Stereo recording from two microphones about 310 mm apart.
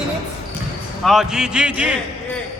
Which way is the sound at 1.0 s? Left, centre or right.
Centre.